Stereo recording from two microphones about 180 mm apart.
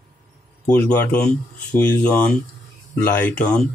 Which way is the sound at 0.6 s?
10° left (ahead or behind).